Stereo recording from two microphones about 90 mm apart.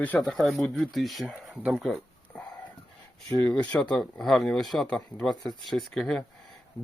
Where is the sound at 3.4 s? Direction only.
15° left (ahead or behind).